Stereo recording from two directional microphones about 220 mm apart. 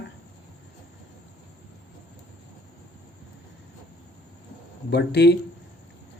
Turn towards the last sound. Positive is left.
turn(degrees=50)  # may be behind; listen again after turning